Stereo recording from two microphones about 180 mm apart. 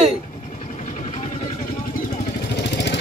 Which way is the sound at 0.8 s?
40° left (ahead or behind).